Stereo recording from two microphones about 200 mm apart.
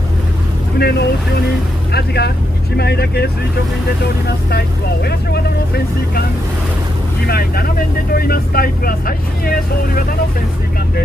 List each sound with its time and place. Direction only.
0.7 s speech: 50° left (ahead or behind)
4.5 s speech: 55° left (ahead or behind)
7.2 s speech: 50° left (ahead or behind)